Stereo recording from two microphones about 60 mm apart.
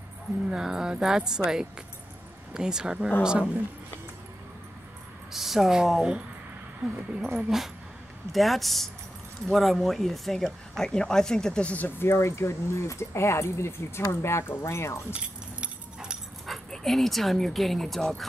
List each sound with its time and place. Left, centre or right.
0.5 s speech: centre
5.3 s speech: centre
10.8 s speech: centre
12.0 s speech: left
15.1 s keys jangling: centre
16.4 s speech: centre